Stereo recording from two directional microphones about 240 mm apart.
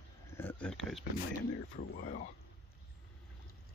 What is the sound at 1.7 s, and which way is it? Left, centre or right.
Speech, left.